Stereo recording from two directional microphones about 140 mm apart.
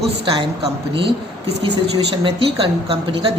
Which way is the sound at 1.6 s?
35° right (ahead or behind).